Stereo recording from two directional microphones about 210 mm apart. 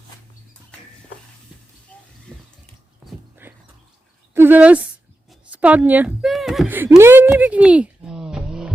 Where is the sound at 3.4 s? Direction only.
10° right (ahead or behind).